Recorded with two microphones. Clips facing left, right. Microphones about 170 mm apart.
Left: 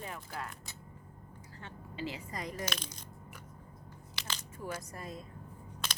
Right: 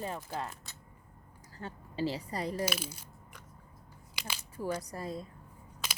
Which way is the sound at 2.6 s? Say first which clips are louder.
Right 5 dB; 10° right (ahead or behind).